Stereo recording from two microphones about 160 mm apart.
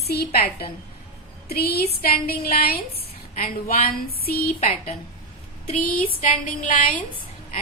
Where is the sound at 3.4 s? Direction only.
60° left (ahead or behind).